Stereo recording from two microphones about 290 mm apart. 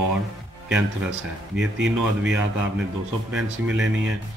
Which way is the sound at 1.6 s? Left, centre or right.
Right.